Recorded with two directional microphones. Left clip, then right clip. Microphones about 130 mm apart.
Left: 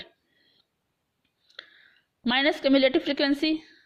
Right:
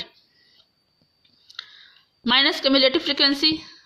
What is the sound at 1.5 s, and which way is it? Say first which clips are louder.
Speech: right 7 dB; 35° left (ahead or behind).